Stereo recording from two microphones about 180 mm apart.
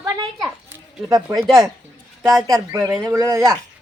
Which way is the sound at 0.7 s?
20° right (ahead or behind).